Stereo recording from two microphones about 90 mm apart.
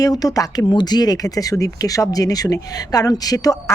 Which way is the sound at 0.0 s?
45° left (ahead or behind).